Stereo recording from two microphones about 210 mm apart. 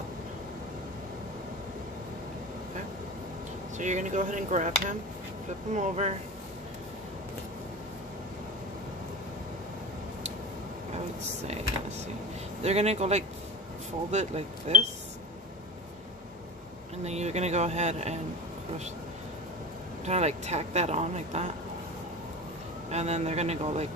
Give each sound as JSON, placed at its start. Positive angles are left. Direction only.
{"t": 3.7, "sound": "speech", "side_deg": -35}
{"t": 12.6, "sound": "speech", "side_deg": -30}
{"t": 17.0, "sound": "speech", "side_deg": -30}
{"t": 20.1, "sound": "speech", "side_deg": -30}
{"t": 22.8, "sound": "speech", "side_deg": -30}